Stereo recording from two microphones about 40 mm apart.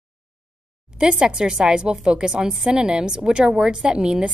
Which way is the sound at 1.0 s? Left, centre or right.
Right.